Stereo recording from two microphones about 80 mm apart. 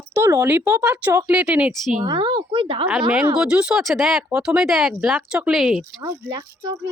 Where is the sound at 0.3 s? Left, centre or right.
Right.